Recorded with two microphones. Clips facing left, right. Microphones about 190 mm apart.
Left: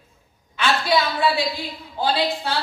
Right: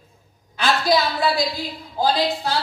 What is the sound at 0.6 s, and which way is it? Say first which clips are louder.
A woman's voice: right 1 dB; 40° right (ahead or behind).